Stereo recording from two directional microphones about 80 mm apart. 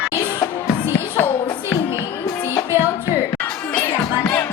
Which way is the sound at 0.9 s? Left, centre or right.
Left.